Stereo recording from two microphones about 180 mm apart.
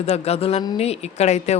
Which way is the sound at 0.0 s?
35° left (ahead or behind).